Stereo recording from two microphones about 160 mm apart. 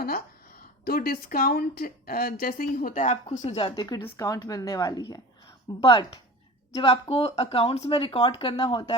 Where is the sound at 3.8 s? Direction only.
25° left (ahead or behind).